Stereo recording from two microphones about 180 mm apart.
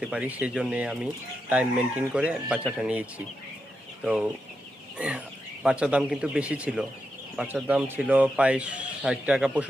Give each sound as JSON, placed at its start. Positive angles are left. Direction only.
{"t": 0.0, "sound": "speech", "side_deg": -5}